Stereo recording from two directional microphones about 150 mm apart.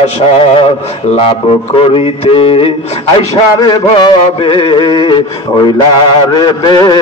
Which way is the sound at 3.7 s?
35° left (ahead or behind).